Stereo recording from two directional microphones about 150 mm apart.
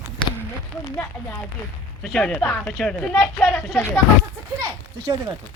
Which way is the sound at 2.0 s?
5° left (ahead or behind).